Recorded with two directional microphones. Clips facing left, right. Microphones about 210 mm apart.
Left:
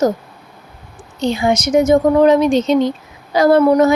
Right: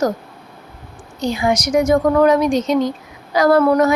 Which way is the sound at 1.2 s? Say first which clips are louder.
Left 2 dB; 25° left (ahead or behind).